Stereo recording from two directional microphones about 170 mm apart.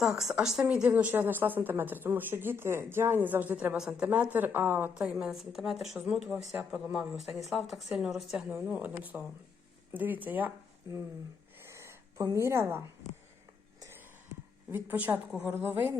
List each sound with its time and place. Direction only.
0.0 s speech: centre (ahead or behind); by 11.0 s 15° right (ahead or behind)
11.6 s a sound: 15° right (ahead or behind)
13.7 s whispering: 15° right (ahead or behind)
14.7 s speech: 10° right (ahead or behind)